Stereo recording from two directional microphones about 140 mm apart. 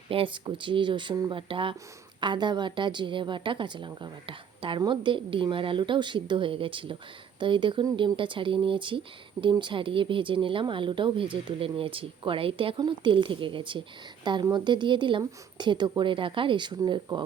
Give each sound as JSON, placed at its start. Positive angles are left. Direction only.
{"t": 0.1, "sound": "speech", "side_deg": -40}